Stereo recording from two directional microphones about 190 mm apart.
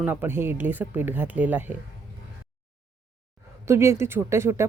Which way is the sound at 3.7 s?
15° right (ahead or behind).